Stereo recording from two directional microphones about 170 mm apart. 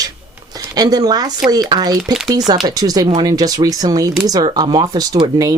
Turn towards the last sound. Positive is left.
turn(degrees=-25)  # may be behind; listen again after turning